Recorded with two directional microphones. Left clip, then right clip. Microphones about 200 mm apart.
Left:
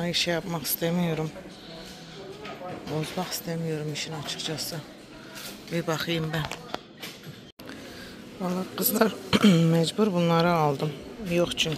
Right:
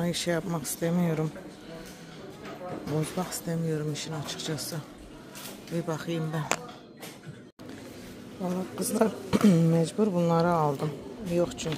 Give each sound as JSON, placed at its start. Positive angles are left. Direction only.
{"t": 0.0, "sound": "speech", "side_deg": -20}
{"t": 3.2, "sound": "speech", "side_deg": -20}
{"t": 5.8, "sound": "speech", "side_deg": -5}
{"t": 8.4, "sound": "a woman's voice", "side_deg": 10}
{"t": 8.7, "sound": "speech", "side_deg": -5}
{"t": 10.5, "sound": "speech", "side_deg": 15}
{"t": 11.3, "sound": "speech", "side_deg": 0}